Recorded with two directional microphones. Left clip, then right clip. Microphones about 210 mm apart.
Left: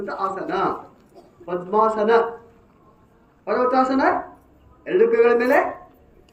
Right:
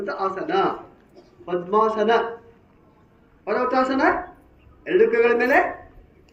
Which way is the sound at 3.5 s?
45° right (ahead or behind).